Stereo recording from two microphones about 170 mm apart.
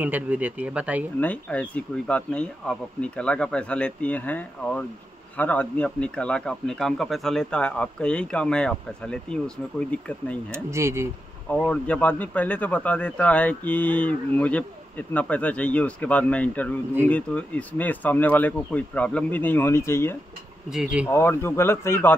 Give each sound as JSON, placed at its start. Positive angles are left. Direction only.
{"t": 0.0, "sound": "speech", "side_deg": -10}
{"t": 1.2, "sound": "speech", "side_deg": 10}
{"t": 10.5, "sound": "speech", "side_deg": -15}
{"t": 11.5, "sound": "speech", "side_deg": 5}